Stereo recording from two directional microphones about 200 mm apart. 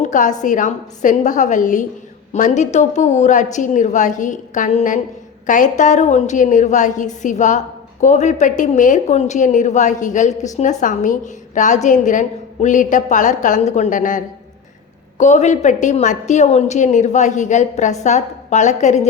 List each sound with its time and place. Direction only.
0.0 s a woman's voice: 40° left (ahead or behind)